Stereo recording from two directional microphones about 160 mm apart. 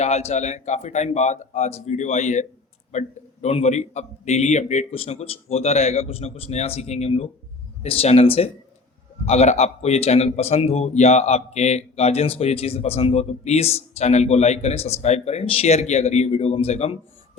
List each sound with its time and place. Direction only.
0.0 s a man's voice: 40° left (ahead or behind)